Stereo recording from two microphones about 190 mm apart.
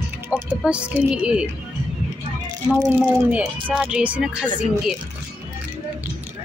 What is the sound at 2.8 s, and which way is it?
Speech, 10° right (ahead or behind).